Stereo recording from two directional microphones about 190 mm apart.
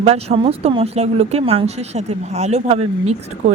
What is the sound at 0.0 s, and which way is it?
Speech, 30° right (ahead or behind).